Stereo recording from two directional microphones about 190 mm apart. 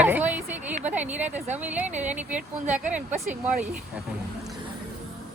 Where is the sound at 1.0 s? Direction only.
40° right (ahead or behind).